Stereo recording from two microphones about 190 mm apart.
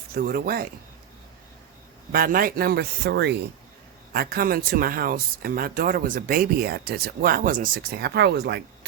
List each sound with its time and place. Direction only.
0.1 s speech: 50° right (ahead or behind)
2.1 s speech: 50° right (ahead or behind)
4.1 s speech: 55° right (ahead or behind)